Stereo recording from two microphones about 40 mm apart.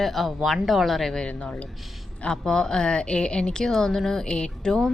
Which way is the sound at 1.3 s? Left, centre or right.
Left.